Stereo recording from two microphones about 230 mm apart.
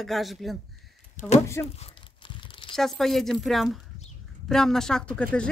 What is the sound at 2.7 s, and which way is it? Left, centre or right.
Speech, centre.